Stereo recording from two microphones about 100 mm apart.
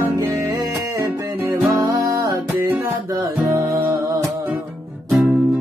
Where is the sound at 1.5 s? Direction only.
35° right (ahead or behind).